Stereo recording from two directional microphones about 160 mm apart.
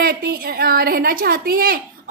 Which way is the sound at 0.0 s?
70° right (ahead or behind).